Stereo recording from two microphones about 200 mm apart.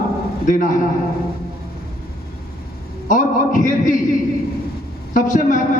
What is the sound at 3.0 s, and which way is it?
Speech, 40° left (ahead or behind).